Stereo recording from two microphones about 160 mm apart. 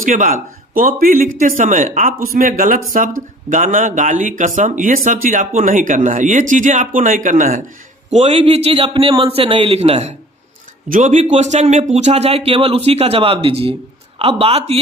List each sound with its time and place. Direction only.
0.0 s a man's voice: 55° right (ahead or behind)
8.1 s speech: 40° right (ahead or behind)